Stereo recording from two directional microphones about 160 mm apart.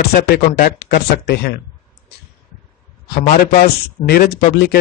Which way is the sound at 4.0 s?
75° left (ahead or behind).